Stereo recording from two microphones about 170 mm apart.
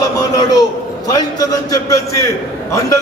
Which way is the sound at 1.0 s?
20° left (ahead or behind).